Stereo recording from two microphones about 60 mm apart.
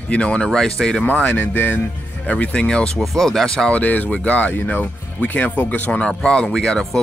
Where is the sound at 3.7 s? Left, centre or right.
Left.